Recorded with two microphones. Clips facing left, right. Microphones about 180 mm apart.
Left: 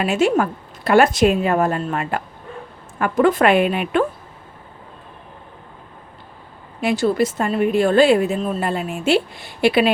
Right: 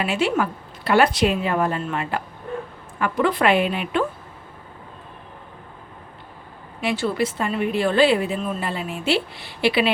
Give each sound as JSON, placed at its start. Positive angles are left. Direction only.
{"t": 0.0, "sound": "a woman's voice", "side_deg": 45}
{"t": 6.8, "sound": "a woman's voice", "side_deg": 45}